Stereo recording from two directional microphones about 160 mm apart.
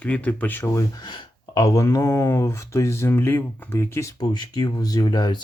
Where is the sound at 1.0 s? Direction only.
25° left (ahead or behind).